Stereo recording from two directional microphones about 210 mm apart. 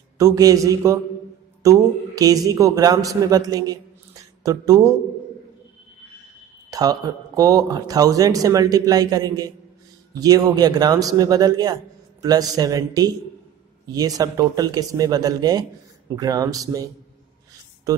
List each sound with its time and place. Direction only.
0.2 s a man's voice: 15° right (ahead or behind)
6.7 s a man's voice: 15° right (ahead or behind)